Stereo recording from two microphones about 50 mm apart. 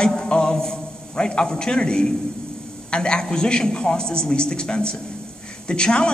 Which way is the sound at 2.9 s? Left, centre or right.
Centre.